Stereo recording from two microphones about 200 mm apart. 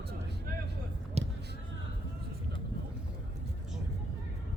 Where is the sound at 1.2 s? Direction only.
30° right (ahead or behind).